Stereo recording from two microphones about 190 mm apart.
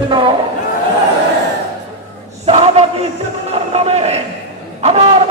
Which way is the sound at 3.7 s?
35° right (ahead or behind).